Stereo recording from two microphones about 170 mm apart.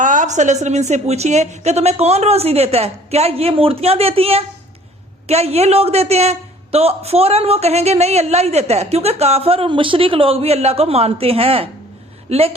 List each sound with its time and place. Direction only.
0.0 s a man's voice: 50° right (ahead or behind)